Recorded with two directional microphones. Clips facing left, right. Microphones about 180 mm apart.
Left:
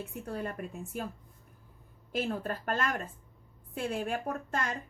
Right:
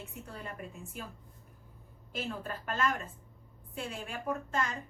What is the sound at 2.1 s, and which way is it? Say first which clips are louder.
A woman's voice: left 5 dB; 45° left (ahead or behind).